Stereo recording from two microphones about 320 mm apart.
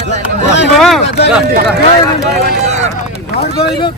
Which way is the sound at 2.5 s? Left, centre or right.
Right.